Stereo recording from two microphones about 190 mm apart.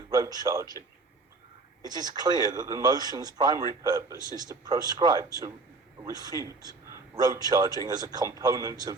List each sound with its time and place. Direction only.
0.1 s speech: 20° right (ahead or behind)
1.8 s a man's voice: 20° right (ahead or behind)